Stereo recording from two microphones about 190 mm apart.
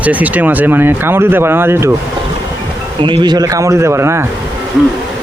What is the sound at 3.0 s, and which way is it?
Speech, 25° right (ahead or behind).